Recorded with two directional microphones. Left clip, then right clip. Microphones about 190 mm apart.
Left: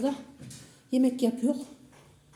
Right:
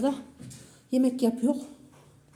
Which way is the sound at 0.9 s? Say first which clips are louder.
Right 1 dB; centre (ahead or behind).